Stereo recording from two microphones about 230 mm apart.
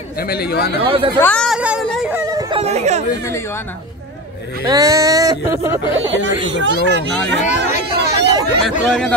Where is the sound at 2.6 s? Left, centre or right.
Right.